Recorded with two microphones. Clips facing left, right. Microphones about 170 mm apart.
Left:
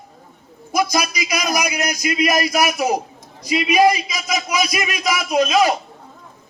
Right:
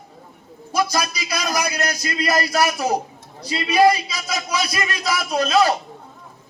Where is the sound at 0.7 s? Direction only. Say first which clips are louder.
Left 2 dB; 15° left (ahead or behind).